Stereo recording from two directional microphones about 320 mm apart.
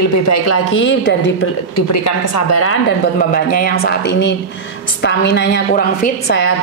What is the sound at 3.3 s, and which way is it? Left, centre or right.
A woman's voice, left.